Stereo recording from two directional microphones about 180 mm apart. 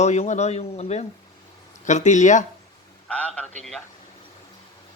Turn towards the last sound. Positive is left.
turn(degrees=5)  # may be behind; listen again after turning